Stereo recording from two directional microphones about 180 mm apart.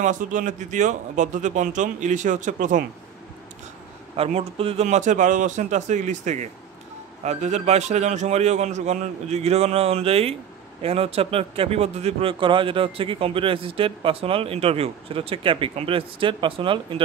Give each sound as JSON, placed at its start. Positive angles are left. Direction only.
{"t": 0.0, "sound": "speech", "side_deg": -45}
{"t": 4.2, "sound": "speech", "side_deg": -35}